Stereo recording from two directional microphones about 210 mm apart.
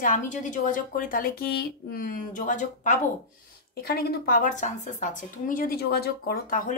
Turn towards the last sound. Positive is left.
turn(degrees=40)  # may be behind; listen again after turning